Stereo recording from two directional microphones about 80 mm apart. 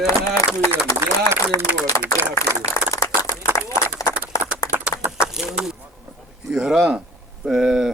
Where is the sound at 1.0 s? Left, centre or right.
Right.